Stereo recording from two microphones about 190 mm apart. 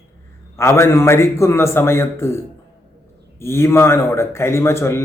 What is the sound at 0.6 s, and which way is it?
A man's voice, 15° left (ahead or behind).